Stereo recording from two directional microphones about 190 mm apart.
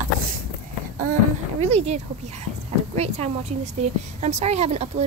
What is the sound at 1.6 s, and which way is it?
A woman's voice, 35° right (ahead or behind).